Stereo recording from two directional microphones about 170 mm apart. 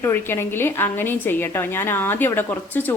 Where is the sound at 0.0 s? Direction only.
15° left (ahead or behind).